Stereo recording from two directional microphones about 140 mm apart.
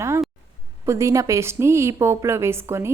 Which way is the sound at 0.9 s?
20° right (ahead or behind).